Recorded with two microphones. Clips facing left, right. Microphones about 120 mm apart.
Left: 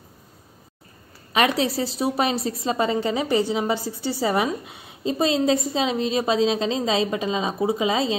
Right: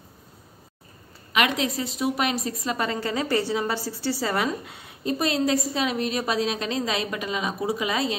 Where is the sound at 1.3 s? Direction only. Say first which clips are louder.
Left 3 dB; 35° left (ahead or behind).